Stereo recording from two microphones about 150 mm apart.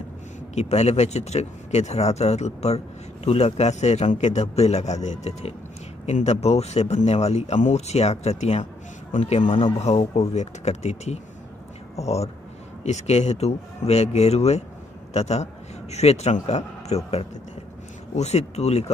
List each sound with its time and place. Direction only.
0.6 s speech: 45° left (ahead or behind)
9.5 s speech: 35° left (ahead or behind)
9.8 s speech: 45° left (ahead or behind)